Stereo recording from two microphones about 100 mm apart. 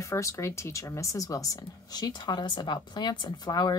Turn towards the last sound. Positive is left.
turn(degrees=45)  # may be behind; listen again after turning